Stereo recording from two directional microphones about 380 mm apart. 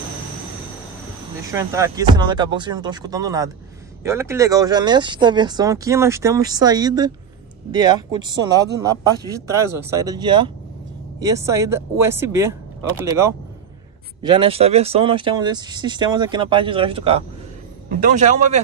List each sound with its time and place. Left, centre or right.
1.5 s a man's voice: centre